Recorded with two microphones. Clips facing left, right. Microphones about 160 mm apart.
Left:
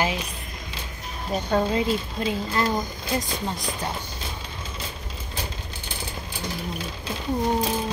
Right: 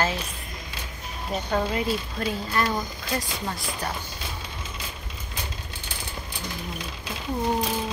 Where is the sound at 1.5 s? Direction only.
25° left (ahead or behind).